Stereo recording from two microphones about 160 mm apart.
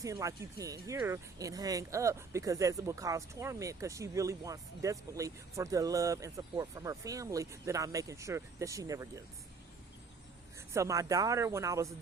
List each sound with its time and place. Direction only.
0.0 s speech: 20° right (ahead or behind)
10.8 s speech: 20° right (ahead or behind)